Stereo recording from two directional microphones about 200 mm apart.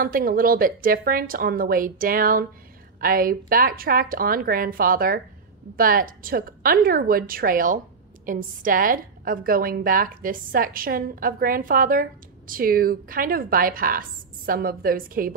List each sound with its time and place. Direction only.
0.0 s a woman's voice: 45° right (ahead or behind)